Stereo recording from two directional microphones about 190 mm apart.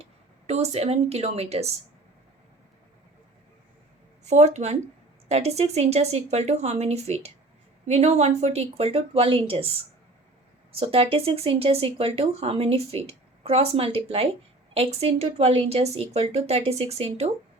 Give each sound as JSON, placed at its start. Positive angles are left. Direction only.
{"t": 0.0, "sound": "speech", "side_deg": -35}
{"t": 4.2, "sound": "speech", "side_deg": -35}
{"t": 10.7, "sound": "speech", "side_deg": -30}